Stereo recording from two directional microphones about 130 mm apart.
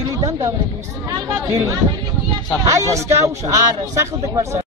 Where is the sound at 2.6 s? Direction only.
25° right (ahead or behind).